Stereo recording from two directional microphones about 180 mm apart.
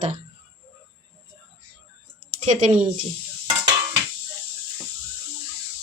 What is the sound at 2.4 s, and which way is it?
Speech, 40° right (ahead or behind).